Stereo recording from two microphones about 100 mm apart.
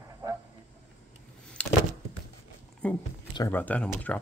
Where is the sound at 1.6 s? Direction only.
10° left (ahead or behind).